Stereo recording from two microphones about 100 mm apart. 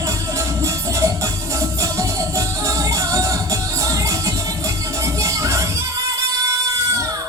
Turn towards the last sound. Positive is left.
turn(degrees=-30)  # may be behind; listen again after turning